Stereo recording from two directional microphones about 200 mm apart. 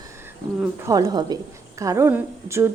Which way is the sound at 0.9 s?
20° right (ahead or behind).